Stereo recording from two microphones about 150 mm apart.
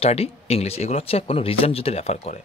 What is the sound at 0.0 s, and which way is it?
Speech, 45° left (ahead or behind).